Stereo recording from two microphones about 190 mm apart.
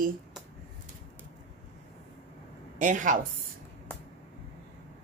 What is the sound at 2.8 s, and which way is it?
Speech, 40° right (ahead or behind).